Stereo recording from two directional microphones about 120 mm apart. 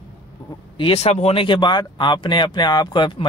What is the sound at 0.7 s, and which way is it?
Speech, 55° left (ahead or behind).